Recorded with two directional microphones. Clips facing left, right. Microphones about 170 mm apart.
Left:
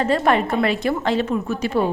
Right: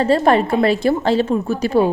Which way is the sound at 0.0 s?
30° right (ahead or behind).